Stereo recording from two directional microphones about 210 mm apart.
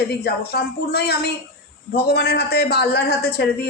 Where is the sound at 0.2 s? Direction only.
50° left (ahead or behind).